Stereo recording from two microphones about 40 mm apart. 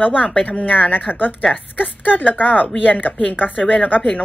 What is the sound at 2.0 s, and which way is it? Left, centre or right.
Speech, left.